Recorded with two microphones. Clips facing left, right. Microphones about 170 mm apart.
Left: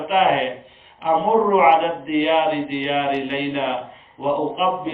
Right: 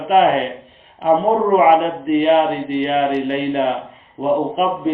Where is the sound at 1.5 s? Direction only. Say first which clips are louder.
Right 2 dB; 40° right (ahead or behind).